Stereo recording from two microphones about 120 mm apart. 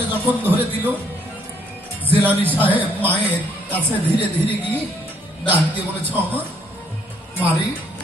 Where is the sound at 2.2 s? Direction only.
15° right (ahead or behind).